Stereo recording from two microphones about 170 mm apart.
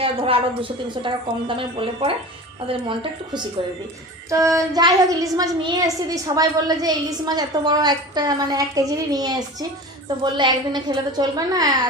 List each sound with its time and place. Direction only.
0.0 s a woman's voice: 30° right (ahead or behind)
4.3 s a woman's voice: 20° right (ahead or behind)